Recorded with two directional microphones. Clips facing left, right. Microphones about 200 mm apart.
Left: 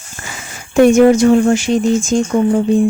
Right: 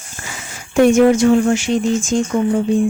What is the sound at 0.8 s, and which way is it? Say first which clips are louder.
Speech: left 3 dB; 40° left (ahead or behind).